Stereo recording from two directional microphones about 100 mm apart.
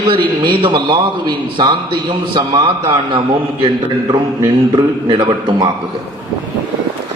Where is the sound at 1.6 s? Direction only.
45° right (ahead or behind).